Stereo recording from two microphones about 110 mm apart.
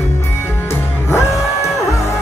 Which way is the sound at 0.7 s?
25° left (ahead or behind).